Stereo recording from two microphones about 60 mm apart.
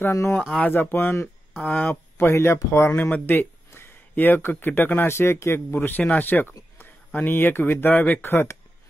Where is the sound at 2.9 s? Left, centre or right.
Left.